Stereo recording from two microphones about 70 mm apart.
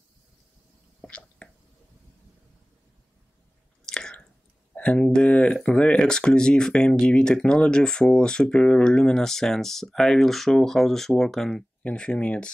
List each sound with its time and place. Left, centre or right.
1.0 s whispering: centre
3.8 s chewing: centre
4.7 s speech: centre
11.8 s speech: centre